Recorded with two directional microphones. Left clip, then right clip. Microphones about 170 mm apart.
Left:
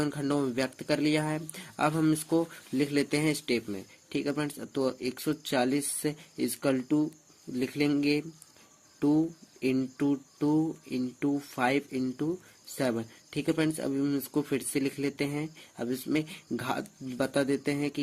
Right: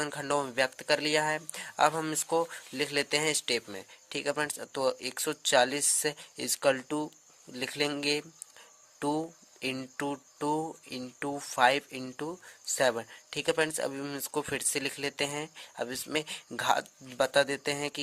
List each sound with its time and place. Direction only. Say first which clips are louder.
0.0 s speech: left 1 dB; 35° right (ahead or behind)